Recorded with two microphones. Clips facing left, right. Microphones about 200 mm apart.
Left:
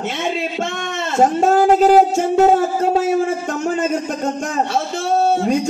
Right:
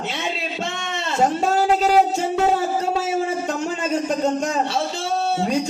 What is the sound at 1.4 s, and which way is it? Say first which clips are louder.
Speech: left 6 dB; 50° left (ahead or behind).